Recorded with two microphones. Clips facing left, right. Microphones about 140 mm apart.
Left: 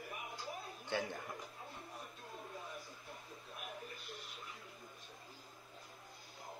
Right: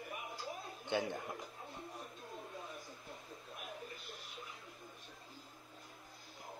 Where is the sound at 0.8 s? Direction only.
20° right (ahead or behind).